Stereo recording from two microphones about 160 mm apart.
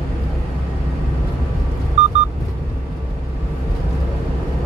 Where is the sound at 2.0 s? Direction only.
40° right (ahead or behind).